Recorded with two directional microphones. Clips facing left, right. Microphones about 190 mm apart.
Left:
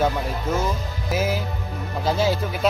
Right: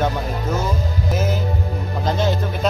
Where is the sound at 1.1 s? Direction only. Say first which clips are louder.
Even; 10° left (ahead or behind).